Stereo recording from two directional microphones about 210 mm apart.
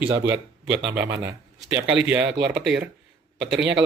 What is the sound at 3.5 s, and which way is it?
Speech, 55° right (ahead or behind).